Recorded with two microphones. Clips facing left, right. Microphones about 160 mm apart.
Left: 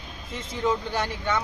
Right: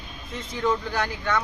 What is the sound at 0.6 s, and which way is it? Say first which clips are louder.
Speech: right 1 dB; 25° left (ahead or behind).